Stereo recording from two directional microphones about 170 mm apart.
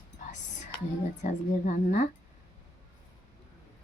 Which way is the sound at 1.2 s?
50° left (ahead or behind).